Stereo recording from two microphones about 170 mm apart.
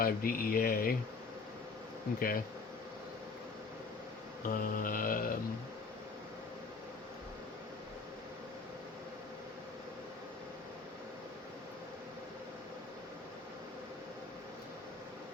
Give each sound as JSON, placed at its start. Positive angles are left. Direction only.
{"t": 0.0, "sound": "speech", "side_deg": 60}
{"t": 2.1, "sound": "speech", "side_deg": 60}
{"t": 4.4, "sound": "speech", "side_deg": 55}